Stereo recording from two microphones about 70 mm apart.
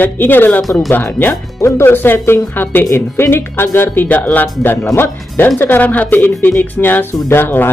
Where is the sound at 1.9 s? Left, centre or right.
Left.